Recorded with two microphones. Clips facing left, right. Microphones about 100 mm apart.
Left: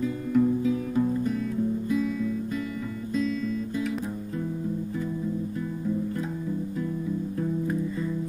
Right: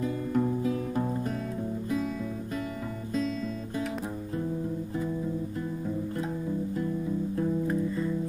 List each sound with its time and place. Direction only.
0.3 s music: 40° right (ahead or behind)